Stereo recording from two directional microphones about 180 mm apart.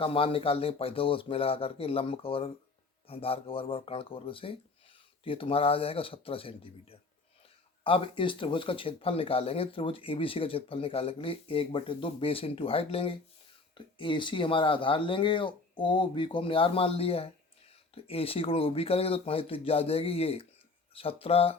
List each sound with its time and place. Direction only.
0.0 s speech: 30° left (ahead or behind)